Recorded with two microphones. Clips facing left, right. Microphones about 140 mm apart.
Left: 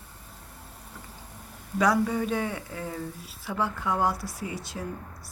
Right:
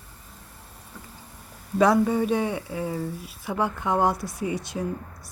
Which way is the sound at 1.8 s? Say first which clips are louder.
Right 4 dB; 25° right (ahead or behind).